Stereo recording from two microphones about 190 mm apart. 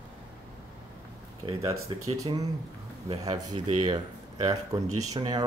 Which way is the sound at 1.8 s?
20° right (ahead or behind).